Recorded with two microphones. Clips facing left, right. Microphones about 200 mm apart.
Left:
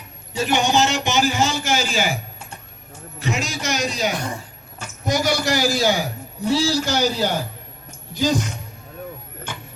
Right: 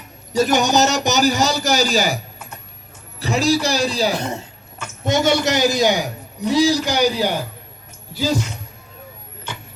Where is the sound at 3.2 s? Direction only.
35° right (ahead or behind); by 7.4 s 15° right (ahead or behind).